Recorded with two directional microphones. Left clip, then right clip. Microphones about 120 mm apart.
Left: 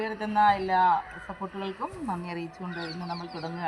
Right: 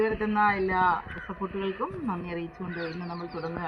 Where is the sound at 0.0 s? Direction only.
20° left (ahead or behind).